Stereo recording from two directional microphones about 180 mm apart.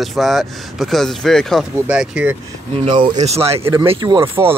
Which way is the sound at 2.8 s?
30° right (ahead or behind).